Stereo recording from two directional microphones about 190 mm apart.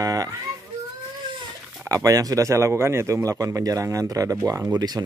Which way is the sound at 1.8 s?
15° right (ahead or behind).